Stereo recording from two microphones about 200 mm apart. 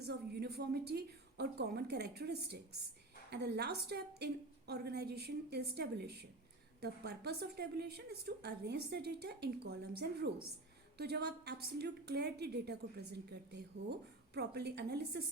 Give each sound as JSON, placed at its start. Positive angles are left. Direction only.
{"t": 0.0, "sound": "a woman's voice", "side_deg": -55}